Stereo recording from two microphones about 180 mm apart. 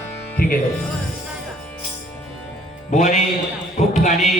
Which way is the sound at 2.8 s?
40° left (ahead or behind).